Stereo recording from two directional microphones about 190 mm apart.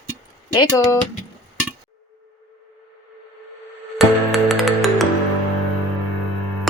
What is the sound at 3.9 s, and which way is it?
Music, centre (ahead or behind).